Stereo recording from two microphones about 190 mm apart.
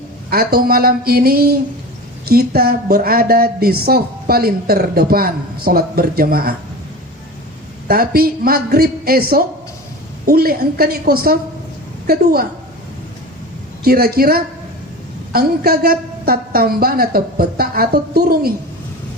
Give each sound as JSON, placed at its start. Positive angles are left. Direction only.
{"t": 0.3, "sound": "a woman's voice", "side_deg": -50}
{"t": 7.9, "sound": "a woman's voice", "side_deg": -55}
{"t": 13.8, "sound": "a woman's voice", "side_deg": -55}